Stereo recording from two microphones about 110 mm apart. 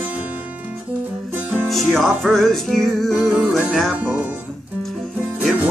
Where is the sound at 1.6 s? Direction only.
Centre (ahead or behind).